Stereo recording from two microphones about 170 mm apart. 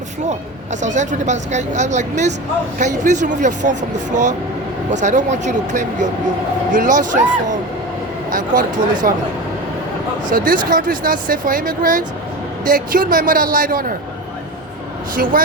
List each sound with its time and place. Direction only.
0.3 s a woman's voice: 45° right (ahead or behind)
8.3 s a woman's voice: 50° right (ahead or behind)
10.2 s a woman's voice: 55° right (ahead or behind)
15.1 s a man's voice: 55° right (ahead or behind)